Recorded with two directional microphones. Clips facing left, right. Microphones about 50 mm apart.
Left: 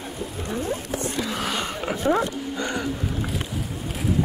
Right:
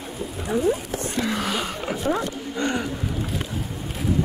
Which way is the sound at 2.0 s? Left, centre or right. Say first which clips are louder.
Left 3 dB; left.